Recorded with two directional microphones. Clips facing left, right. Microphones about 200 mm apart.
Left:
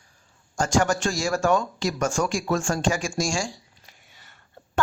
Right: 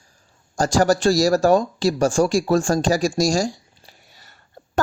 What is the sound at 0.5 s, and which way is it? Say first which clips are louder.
A woman's voice: right 5 dB; 35° right (ahead or behind).